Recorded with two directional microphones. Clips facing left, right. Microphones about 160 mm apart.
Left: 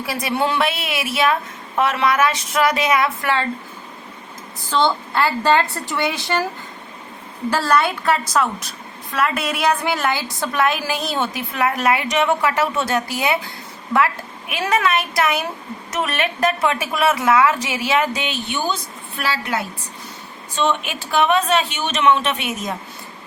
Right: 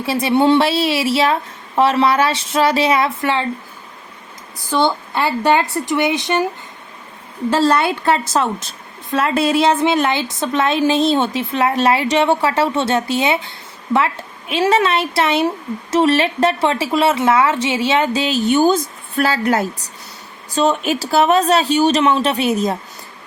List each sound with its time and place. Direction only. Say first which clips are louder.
0.0 s a woman's voice: right 7 dB; 25° right (ahead or behind)
4.7 s speech: right 2 dB; 15° right (ahead or behind)
7.5 s a woman's voice: right 3 dB; 25° right (ahead or behind)